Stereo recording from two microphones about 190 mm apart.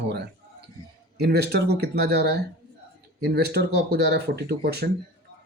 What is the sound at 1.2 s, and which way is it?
Speech, 60° right (ahead or behind).